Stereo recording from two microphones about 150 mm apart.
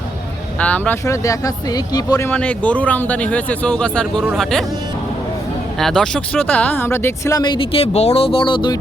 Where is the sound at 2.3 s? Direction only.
10° left (ahead or behind).